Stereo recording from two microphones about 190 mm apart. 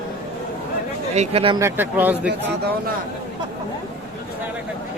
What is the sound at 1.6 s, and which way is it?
Speech, 10° right (ahead or behind).